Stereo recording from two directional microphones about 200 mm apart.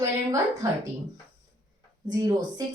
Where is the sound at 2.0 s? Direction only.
20° right (ahead or behind).